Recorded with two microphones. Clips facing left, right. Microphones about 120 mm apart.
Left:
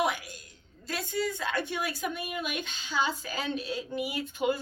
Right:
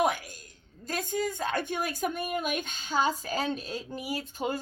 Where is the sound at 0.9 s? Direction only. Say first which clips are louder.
Right 1 dB; 45° right (ahead or behind).